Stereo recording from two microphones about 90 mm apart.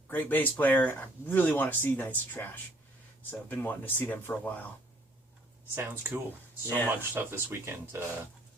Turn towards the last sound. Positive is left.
turn(degrees=-25)  # may be behind; listen again after turning